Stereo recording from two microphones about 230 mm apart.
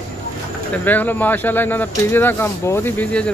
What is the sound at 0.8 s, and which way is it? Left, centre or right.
A man's voice, centre.